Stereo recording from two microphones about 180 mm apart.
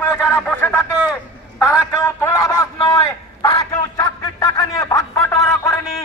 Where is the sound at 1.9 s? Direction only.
15° left (ahead or behind).